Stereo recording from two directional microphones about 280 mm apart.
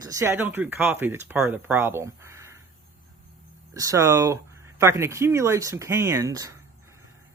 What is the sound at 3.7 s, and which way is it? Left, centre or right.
Speech, centre.